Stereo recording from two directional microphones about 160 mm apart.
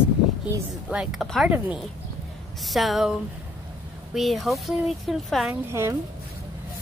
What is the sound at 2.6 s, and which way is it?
A woman's voice, centre (ahead or behind).